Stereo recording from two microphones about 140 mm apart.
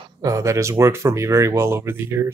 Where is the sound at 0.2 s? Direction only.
25° right (ahead or behind).